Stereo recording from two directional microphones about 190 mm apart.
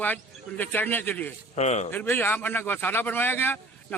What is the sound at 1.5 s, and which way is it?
Speech, 35° left (ahead or behind).